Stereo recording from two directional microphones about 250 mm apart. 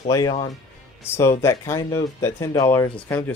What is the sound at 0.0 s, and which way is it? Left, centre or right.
Speech, centre.